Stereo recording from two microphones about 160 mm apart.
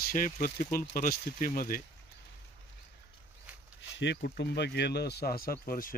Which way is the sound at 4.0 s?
85° left.